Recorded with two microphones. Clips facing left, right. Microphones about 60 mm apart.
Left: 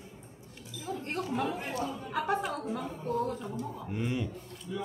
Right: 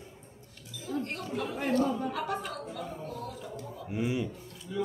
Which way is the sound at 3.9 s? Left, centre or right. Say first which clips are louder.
Right 4 dB; centre.